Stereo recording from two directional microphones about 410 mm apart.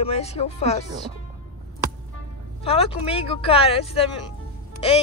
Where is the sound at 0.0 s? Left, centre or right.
Centre.